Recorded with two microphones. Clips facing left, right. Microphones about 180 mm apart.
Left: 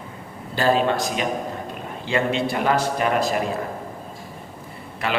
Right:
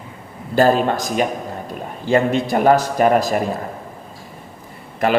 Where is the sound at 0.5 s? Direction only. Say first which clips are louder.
Right 5 dB; 45° right (ahead or behind).